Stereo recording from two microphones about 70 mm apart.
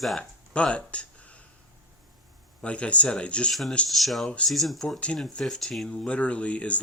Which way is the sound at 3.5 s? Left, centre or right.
Centre.